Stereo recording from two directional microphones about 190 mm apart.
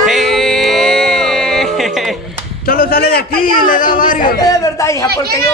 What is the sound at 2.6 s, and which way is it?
A man's voice, 50° left (ahead or behind).